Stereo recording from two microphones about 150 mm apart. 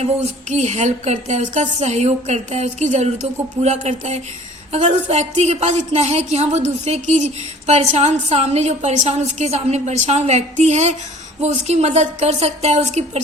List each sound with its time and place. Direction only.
0.5 s a woman's voice: 50° right (ahead or behind)